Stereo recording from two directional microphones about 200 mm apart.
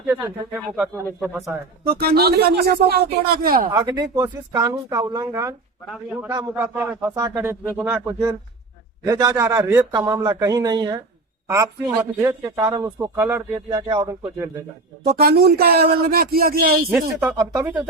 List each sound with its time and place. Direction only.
0.5 s speech: 5° right (ahead or behind)
1.9 s a man's voice: 50° right (ahead or behind)
3.7 s a man's voice: 20° right (ahead or behind)
15.0 s a man's voice: 50° right (ahead or behind)
16.9 s a man's voice: 10° right (ahead or behind)